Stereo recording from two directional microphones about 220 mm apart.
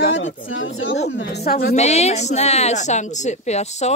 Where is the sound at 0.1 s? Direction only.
60° left (ahead or behind).